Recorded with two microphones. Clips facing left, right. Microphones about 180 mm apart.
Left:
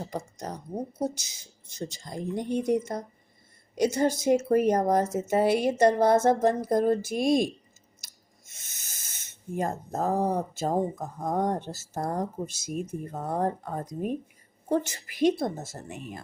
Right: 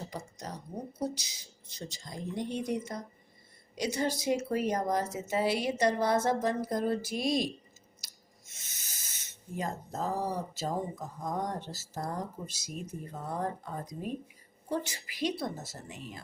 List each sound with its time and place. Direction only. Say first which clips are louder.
0.1 s speech: left 6 dB; 50° left (ahead or behind)
8.0 s a sound: even; 50° left (ahead or behind)
8.6 s speech: left 1 dB; 50° left (ahead or behind)